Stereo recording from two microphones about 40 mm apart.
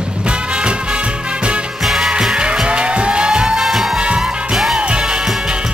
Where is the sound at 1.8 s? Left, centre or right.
Centre; by 3.3 s right.